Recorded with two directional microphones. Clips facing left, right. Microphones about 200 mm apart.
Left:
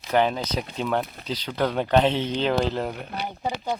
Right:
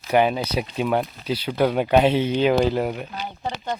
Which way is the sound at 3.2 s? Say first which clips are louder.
Left 5 dB; 10° left (ahead or behind).